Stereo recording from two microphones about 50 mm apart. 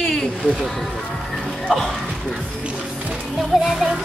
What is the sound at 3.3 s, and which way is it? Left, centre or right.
Speech, centre.